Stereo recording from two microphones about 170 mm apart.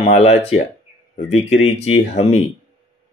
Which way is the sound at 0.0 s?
40° left (ahead or behind).